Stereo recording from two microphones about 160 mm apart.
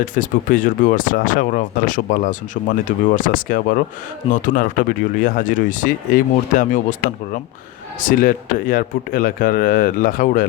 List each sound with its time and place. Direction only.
0.0 s speech: 55° left (ahead or behind)
8.0 s speech: 60° left (ahead or behind)